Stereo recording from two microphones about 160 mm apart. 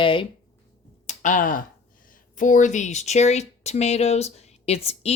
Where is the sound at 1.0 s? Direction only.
55° left (ahead or behind).